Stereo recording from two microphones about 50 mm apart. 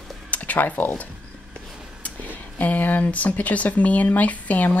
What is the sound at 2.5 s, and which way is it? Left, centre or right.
Speech, left.